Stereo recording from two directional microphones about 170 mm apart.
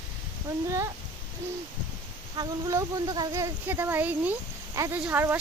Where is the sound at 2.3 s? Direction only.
20° right (ahead or behind).